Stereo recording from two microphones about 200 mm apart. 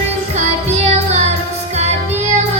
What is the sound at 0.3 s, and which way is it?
Music, 35° right (ahead or behind).